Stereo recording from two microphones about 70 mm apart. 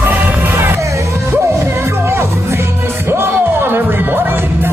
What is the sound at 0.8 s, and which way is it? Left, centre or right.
Music, right.